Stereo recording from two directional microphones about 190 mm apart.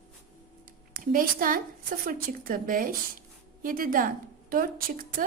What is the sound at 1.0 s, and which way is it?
Speech, 45° right (ahead or behind).